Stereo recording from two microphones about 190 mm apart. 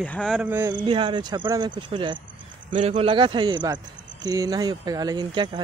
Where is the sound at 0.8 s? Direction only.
25° right (ahead or behind).